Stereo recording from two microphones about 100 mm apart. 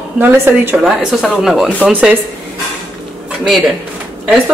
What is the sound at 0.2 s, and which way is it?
Speech, 20° right (ahead or behind).